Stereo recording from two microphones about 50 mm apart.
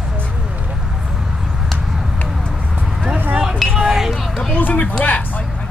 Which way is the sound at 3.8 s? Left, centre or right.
Centre.